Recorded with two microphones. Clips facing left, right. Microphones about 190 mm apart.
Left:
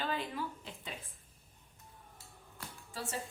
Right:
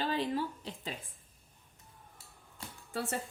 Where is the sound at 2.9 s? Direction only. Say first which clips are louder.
Right 7 dB; 60° right (ahead or behind).